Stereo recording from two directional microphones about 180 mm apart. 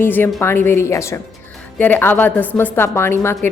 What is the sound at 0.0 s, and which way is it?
A woman's voice, 10° left (ahead or behind).